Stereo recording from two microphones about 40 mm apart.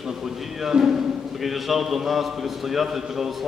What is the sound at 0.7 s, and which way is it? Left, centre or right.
Speech, right.